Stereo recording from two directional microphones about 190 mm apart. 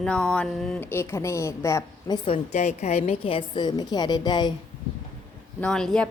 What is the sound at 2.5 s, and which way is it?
A woman's voice, 35° left (ahead or behind).